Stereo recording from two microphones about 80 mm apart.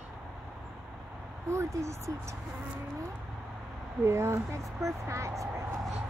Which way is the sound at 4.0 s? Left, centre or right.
Right.